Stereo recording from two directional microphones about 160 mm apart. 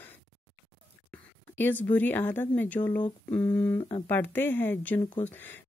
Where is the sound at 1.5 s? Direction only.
10° left (ahead or behind).